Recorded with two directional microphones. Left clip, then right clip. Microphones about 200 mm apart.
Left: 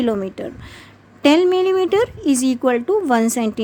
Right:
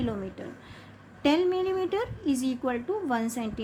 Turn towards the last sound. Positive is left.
turn(degrees=50)  # may be behind; listen again after turning